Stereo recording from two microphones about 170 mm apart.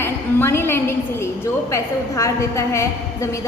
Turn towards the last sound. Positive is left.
turn(degrees=15)  # may be behind; listen again after turning